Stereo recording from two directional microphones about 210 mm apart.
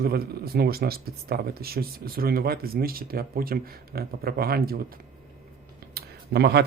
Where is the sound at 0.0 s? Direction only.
45° right (ahead or behind).